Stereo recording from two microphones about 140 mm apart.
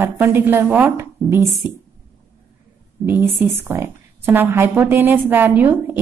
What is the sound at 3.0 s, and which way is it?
A woman's voice, 15° right (ahead or behind).